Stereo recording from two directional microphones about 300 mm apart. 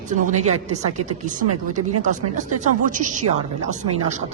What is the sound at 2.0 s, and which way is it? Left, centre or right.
A woman's voice, right.